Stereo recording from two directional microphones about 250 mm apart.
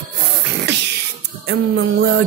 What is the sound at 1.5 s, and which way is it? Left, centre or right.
Music, right.